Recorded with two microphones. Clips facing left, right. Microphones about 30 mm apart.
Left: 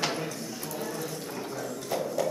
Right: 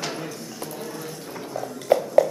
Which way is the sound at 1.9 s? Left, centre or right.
Right.